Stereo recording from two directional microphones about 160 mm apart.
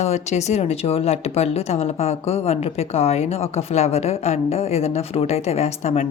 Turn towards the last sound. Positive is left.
turn(degrees=45)  # may be behind; listen again after turning